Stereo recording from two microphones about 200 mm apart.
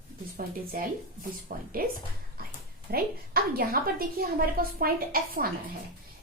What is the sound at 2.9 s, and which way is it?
A woman's voice, 50° right (ahead or behind).